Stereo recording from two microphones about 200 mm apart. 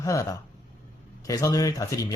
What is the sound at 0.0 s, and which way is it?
Speech, 15° left (ahead or behind).